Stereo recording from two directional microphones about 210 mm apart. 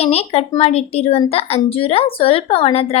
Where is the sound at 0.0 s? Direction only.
30° left (ahead or behind).